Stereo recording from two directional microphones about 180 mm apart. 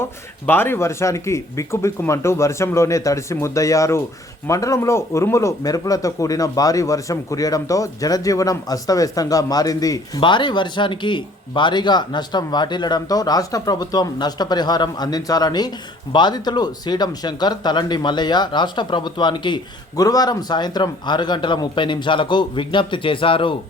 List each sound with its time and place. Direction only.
0.0 s speech: 10° left (ahead or behind); by 23.6 s 30° left (ahead or behind)